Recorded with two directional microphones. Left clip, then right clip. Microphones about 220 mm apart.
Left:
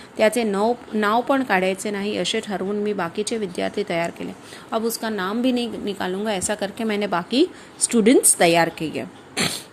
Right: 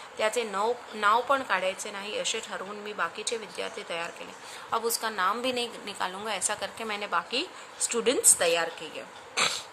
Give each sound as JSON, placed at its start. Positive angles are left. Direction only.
{"t": 0.2, "sound": "a woman's voice", "side_deg": 25}
{"t": 9.3, "sound": "throat clearing", "side_deg": 15}